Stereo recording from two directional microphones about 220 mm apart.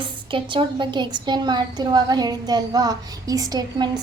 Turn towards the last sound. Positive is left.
turn(degrees=-15)  # may be behind; listen again after turning